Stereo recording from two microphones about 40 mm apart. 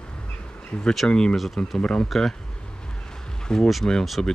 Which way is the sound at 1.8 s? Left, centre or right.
Left.